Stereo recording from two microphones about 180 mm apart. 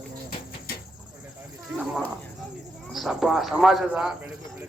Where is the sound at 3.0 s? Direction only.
Centre (ahead or behind).